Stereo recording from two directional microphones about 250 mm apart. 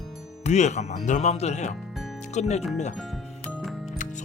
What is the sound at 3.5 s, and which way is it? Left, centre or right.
Music, centre.